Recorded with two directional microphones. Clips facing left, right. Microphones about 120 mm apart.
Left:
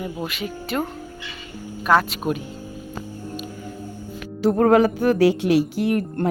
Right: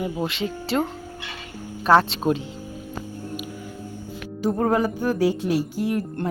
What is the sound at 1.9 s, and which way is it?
Speech, 30° right (ahead or behind).